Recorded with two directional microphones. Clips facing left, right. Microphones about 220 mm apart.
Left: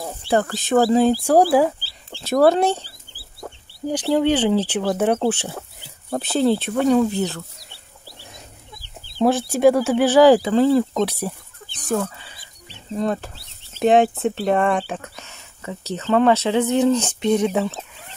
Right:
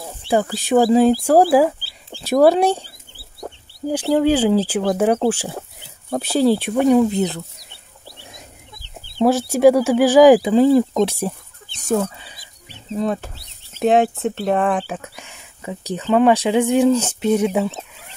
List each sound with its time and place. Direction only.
0.3 s speech: 10° right (ahead or behind)
3.2 s chicken: 25° right (ahead or behind)
3.8 s speech: 5° right (ahead or behind)
9.2 s speech: 10° right (ahead or behind); by 11.3 s 25° right (ahead or behind)
11.9 s chicken: 20° right (ahead or behind)
12.9 s speech: centre (ahead or behind)